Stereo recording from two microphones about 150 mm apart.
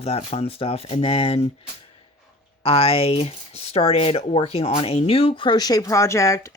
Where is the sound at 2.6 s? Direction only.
40° left (ahead or behind); by 6.5 s 20° left (ahead or behind).